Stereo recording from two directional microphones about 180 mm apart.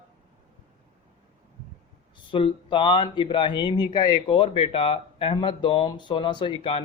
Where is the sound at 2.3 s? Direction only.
25° left (ahead or behind).